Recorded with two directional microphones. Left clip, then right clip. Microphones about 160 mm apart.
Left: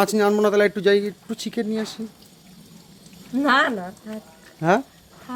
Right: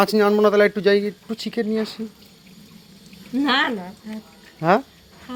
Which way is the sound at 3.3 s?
30° left (ahead or behind).